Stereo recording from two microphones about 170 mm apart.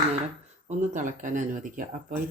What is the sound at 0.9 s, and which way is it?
Speech, 50° right (ahead or behind).